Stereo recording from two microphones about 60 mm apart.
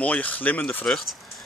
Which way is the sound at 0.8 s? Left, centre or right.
Centre.